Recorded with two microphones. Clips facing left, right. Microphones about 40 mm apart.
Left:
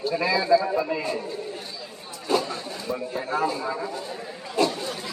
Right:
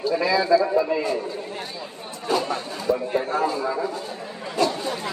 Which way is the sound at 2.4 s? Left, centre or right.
Right.